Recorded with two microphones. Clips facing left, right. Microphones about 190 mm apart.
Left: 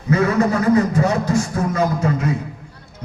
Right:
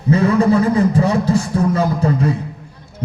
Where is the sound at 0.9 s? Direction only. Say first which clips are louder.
Right 2 dB; 30° right (ahead or behind).